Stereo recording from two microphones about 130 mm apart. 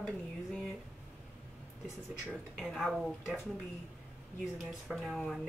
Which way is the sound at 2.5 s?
Centre (ahead or behind).